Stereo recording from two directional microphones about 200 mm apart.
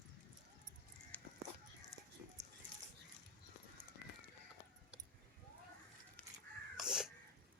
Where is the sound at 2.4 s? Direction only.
15° right (ahead or behind).